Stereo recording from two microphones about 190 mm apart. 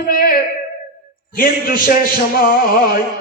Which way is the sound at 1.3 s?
50° left (ahead or behind).